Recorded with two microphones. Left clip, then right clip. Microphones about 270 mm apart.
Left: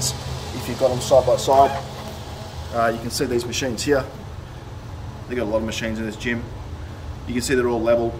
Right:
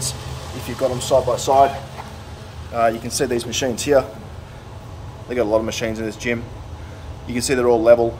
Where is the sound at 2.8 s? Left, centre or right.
Centre.